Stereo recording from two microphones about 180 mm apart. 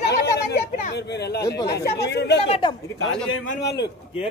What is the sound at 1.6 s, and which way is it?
Speech, 70° left (ahead or behind).